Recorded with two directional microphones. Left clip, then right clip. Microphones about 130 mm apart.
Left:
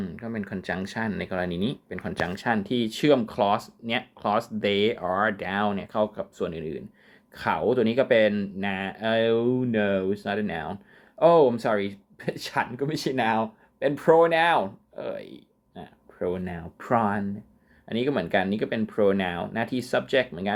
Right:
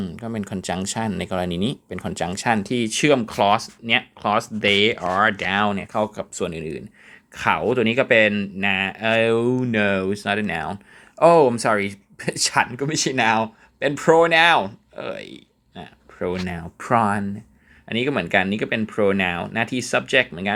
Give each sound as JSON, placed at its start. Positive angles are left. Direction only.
{"t": 0.2, "sound": "speech", "side_deg": -40}
{"t": 12.7, "sound": "speech", "side_deg": -30}